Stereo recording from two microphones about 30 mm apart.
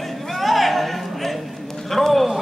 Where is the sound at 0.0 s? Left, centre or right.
Centre.